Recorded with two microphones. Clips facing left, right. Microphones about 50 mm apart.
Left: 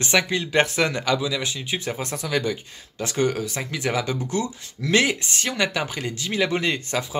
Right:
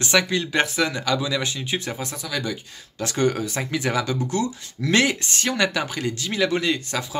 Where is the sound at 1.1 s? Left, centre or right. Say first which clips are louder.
Right 1 dB; centre.